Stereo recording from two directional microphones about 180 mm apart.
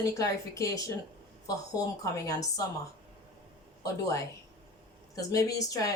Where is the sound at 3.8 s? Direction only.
20° left (ahead or behind).